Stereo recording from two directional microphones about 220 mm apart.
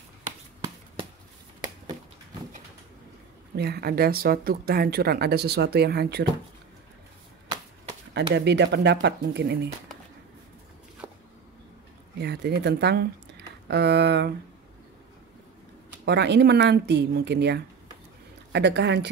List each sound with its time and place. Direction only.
3.5 s speech: 45° right (ahead or behind)
8.4 s speech: 50° right (ahead or behind)
11.0 s a sound: 5° right (ahead or behind)
12.2 s speech: 50° right (ahead or behind)
16.1 s speech: 50° right (ahead or behind)